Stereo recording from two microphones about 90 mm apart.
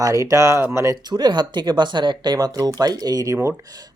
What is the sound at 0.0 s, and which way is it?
Speech, 35° right (ahead or behind).